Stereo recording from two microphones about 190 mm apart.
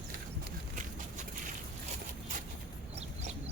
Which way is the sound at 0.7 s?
45° right (ahead or behind).